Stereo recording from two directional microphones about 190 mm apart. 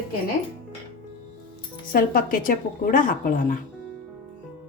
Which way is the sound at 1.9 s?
50° left (ahead or behind).